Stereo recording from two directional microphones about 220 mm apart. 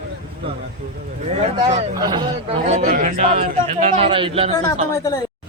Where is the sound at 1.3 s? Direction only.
30° right (ahead or behind).